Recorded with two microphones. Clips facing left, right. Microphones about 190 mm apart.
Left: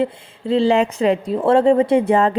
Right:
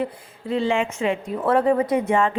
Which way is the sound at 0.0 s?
30° left (ahead or behind).